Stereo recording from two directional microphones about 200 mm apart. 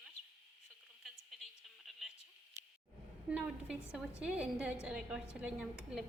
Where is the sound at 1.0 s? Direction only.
Centre (ahead or behind).